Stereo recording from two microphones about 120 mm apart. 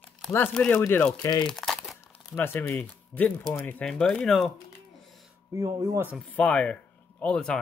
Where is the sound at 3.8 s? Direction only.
5° left (ahead or behind).